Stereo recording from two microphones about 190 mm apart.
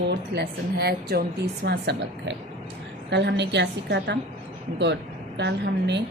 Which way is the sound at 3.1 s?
65° right (ahead or behind).